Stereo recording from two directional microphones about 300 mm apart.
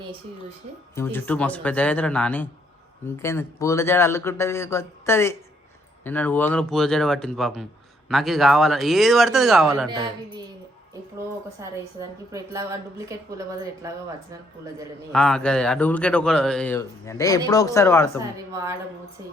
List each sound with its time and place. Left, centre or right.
0.9 s a man's voice: centre
9.9 s a woman's voice: centre
11.6 s a woman's voice: centre
13.8 s a woman's voice: centre
15.1 s speech: centre